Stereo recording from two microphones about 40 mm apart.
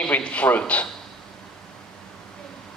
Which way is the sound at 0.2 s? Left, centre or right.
Left.